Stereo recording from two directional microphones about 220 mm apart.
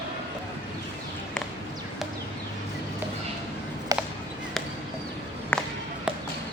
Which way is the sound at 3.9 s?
15° right (ahead or behind).